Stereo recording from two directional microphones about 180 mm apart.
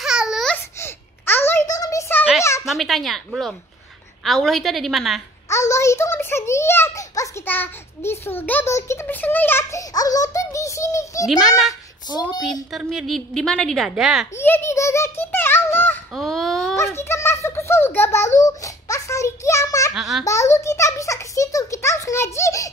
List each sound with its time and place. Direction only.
0.0 s babbling: 5° right (ahead or behind)
0.6 s a sound: 15° left (ahead or behind)
2.7 s a woman's voice: centre (ahead or behind)
5.5 s a child's voice: 15° left (ahead or behind)
11.2 s a woman's voice: centre (ahead or behind)
12.7 s a woman's voice: centre (ahead or behind)
14.3 s a child's voice: 10° left (ahead or behind)
16.1 s baby cry: centre (ahead or behind)
16.7 s a child's voice: 15° left (ahead or behind)
19.9 s a woman's voice: centre (ahead or behind)
20.2 s a child's voice: 15° left (ahead or behind)